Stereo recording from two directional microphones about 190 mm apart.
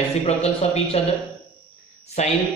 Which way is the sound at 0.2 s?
35° left (ahead or behind).